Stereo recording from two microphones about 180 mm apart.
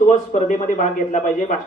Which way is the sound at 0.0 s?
45° left (ahead or behind).